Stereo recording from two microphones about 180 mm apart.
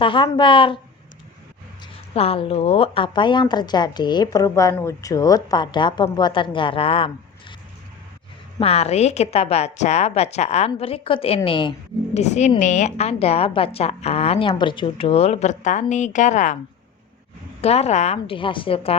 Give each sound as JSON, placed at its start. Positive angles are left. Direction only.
{"t": 0.0, "sound": "speech", "side_deg": 25}
{"t": 2.1, "sound": "speech", "side_deg": 30}
{"t": 8.6, "sound": "a woman's voice", "side_deg": 35}
{"t": 12.1, "sound": "a woman's voice", "side_deg": 40}
{"t": 17.6, "sound": "a woman's voice", "side_deg": 35}